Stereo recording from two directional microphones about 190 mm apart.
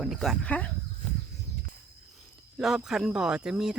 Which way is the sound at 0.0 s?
Centre (ahead or behind).